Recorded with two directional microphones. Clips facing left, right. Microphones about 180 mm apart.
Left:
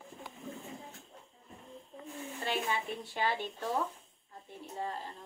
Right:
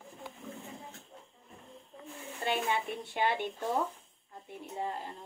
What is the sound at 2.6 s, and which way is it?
A woman's voice, 20° right (ahead or behind).